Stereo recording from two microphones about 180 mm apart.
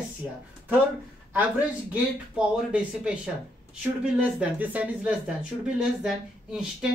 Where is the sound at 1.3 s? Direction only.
10° right (ahead or behind).